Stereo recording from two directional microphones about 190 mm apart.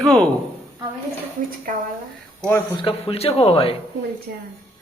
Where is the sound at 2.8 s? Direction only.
30° left (ahead or behind).